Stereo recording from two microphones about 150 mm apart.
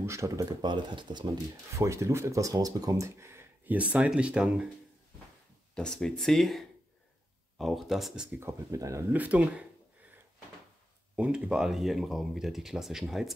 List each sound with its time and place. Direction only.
0.0 s speech: 20° right (ahead or behind)
5.8 s speech: 5° left (ahead or behind)
8.4 s speech: 20° right (ahead or behind)
9.1 s speech: 10° right (ahead or behind)
11.1 s speech: 10° right (ahead or behind)